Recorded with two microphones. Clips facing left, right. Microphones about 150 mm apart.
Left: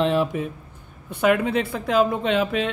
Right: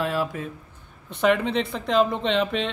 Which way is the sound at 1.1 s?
5° left (ahead or behind).